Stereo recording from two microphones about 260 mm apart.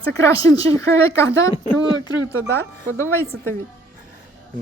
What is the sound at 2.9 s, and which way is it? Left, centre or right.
Speech, centre.